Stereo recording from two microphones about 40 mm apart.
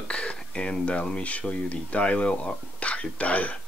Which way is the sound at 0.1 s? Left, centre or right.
Left.